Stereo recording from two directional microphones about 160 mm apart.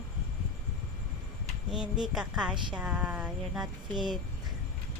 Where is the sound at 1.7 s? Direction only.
5° right (ahead or behind).